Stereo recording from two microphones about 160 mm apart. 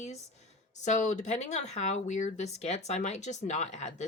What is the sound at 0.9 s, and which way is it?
Speech, 45° left (ahead or behind).